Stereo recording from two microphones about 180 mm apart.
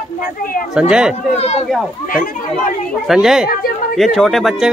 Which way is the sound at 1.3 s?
35° left (ahead or behind).